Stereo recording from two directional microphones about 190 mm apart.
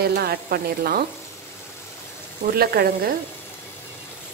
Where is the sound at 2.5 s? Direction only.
55° right (ahead or behind).